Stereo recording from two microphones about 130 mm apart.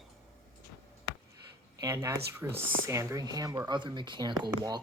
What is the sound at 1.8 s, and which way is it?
Speech, 25° right (ahead or behind).